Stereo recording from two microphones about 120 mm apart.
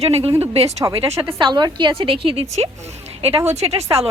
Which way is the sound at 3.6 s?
60° right (ahead or behind).